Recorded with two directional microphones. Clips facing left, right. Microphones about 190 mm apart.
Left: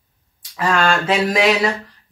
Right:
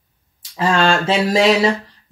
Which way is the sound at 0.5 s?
30° right (ahead or behind).